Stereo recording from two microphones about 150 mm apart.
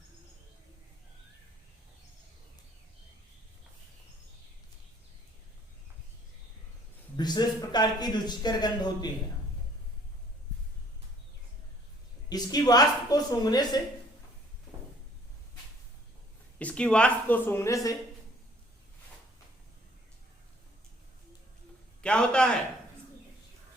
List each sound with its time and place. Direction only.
7.2 s a man's voice: 30° left (ahead or behind)
12.3 s a man's voice: 25° left (ahead or behind)
16.6 s speech: 10° left (ahead or behind)
22.0 s a man's voice: 5° left (ahead or behind)